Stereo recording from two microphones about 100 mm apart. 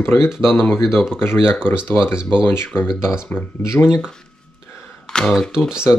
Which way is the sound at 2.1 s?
10° right (ahead or behind).